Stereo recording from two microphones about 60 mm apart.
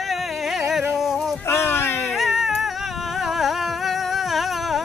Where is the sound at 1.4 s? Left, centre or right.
Left.